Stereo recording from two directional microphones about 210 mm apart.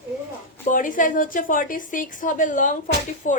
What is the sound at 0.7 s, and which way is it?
A woman's voice, 40° left (ahead or behind).